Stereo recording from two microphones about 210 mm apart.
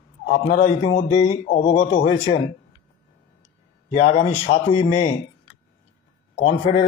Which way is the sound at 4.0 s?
35° left (ahead or behind).